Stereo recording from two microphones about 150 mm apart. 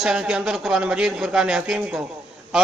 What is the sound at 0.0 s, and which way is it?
A man's voice, 5° right (ahead or behind).